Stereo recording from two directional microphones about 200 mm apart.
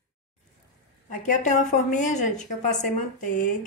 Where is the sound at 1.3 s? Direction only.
40° left (ahead or behind).